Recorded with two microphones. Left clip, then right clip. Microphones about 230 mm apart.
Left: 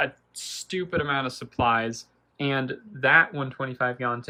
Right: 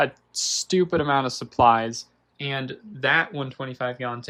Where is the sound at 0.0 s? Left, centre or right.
Centre.